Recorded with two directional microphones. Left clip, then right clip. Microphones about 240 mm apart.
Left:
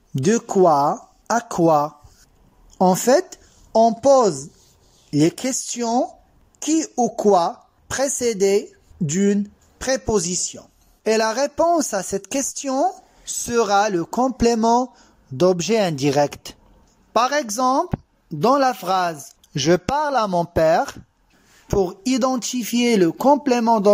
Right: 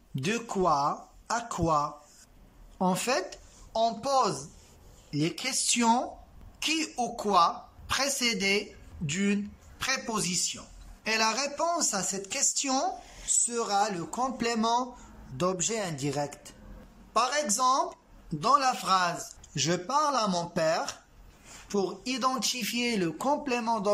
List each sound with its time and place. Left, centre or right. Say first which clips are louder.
0.1 s a man's voice: left 12 dB; left